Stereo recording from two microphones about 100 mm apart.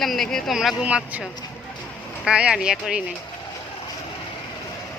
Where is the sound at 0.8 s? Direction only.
15° right (ahead or behind).